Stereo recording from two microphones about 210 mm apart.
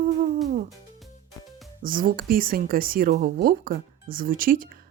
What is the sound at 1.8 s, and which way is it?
Speech, 40° right (ahead or behind).